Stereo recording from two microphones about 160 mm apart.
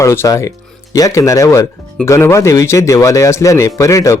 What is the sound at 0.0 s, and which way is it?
A man's voice, 15° left (ahead or behind).